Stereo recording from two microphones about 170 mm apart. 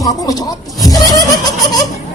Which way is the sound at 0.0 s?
20° left (ahead or behind).